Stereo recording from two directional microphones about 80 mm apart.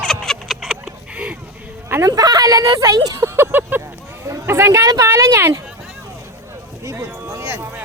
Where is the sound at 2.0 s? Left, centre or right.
Right.